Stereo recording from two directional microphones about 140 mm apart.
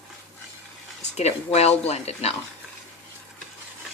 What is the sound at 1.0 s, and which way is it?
Speech, 50° left (ahead or behind).